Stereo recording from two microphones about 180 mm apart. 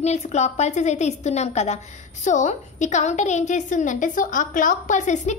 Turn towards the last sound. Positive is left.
turn(degrees=40)  # may be behind; listen again after turning